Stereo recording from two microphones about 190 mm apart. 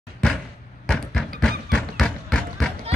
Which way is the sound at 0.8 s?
5° left (ahead or behind).